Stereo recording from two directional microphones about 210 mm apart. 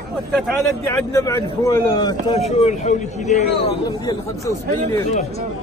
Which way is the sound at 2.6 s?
35° left (ahead or behind).